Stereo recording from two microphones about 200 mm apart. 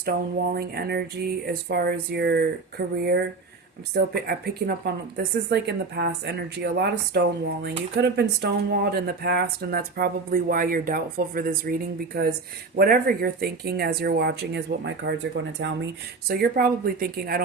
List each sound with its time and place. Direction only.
0.0 s speech: 50° right (ahead or behind)
12.7 s speech: 45° right (ahead or behind); by 15.7 s 65° right (ahead or behind)
16.3 s speech: 50° right (ahead or behind)